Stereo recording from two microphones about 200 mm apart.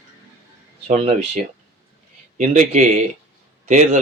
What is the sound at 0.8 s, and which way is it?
Speech, 35° right (ahead or behind).